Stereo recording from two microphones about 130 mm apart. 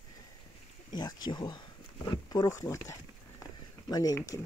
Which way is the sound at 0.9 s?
35° left (ahead or behind).